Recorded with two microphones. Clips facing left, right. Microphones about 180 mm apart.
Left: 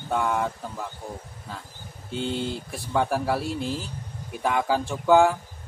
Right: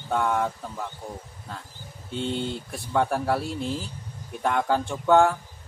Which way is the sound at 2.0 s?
Centre (ahead or behind).